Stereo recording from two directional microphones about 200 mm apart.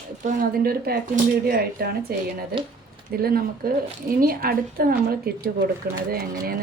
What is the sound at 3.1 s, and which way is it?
A woman's voice, 50° right (ahead or behind).